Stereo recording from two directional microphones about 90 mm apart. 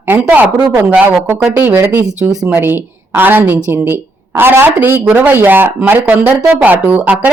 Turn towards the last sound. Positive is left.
turn(degrees=-15)  # may be behind; listen again after turning